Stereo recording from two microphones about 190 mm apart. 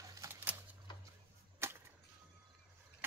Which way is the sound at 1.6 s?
15° right (ahead or behind).